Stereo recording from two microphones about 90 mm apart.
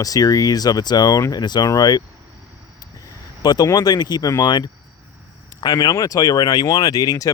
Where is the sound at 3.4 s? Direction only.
50° left (ahead or behind).